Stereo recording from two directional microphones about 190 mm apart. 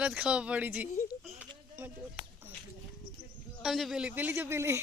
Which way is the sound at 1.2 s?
5° right (ahead or behind).